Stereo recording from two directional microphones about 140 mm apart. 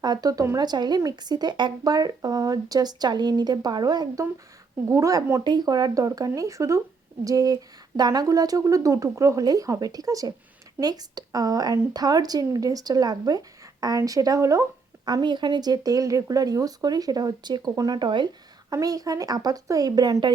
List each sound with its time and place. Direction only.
0.0 s speech: 30° right (ahead or behind)